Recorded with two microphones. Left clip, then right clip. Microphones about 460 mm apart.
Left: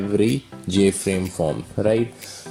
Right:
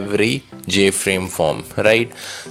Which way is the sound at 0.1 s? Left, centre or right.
Centre.